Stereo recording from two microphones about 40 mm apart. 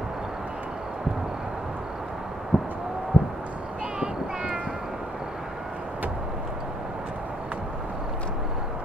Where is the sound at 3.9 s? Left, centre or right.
Right.